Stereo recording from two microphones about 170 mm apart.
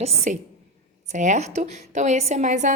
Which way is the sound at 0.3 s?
45° right (ahead or behind).